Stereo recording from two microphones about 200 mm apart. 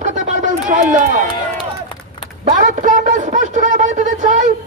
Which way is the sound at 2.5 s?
40° right (ahead or behind).